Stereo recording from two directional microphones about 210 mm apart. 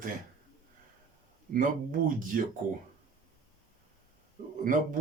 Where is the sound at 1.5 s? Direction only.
40° right (ahead or behind).